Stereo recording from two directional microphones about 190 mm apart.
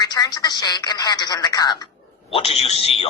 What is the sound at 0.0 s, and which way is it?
A woman's voice, 20° left (ahead or behind).